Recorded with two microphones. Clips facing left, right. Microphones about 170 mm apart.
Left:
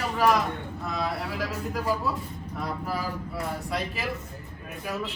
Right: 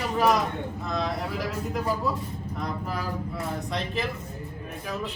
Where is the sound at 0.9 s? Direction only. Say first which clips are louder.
Even; 5° left (ahead or behind).